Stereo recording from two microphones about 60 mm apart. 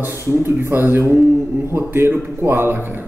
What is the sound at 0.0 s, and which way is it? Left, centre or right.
A man's voice, right.